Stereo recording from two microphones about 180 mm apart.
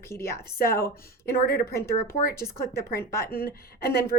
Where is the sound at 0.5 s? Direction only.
55° left (ahead or behind).